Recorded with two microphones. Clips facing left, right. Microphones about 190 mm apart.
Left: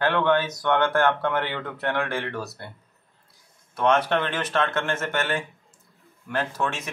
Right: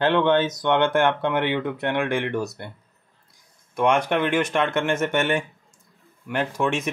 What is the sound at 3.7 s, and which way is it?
Speech, 10° right (ahead or behind).